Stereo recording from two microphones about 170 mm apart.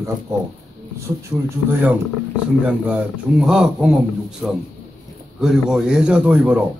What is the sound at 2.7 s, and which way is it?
A man's voice, 5° right (ahead or behind).